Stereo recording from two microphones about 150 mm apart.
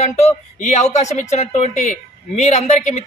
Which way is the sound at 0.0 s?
50° left (ahead or behind).